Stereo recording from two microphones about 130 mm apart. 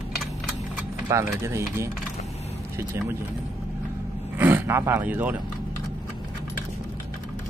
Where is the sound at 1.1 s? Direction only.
20° right (ahead or behind).